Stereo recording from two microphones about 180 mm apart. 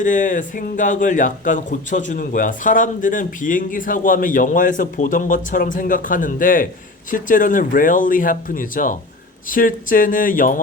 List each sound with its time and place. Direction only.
0.0 s speech: 45° left (ahead or behind)